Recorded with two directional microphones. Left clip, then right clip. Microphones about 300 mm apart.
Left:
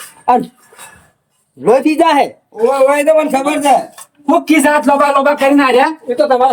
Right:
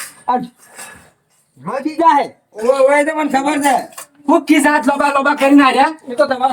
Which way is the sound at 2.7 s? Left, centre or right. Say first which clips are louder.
Left 4 dB; left.